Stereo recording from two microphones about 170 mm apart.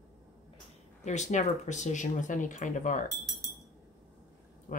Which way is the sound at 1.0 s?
45° left (ahead or behind).